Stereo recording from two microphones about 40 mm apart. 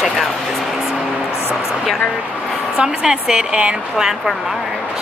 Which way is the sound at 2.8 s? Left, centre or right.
Right.